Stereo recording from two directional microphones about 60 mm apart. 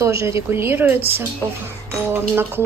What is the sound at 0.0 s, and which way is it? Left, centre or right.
Speech, right.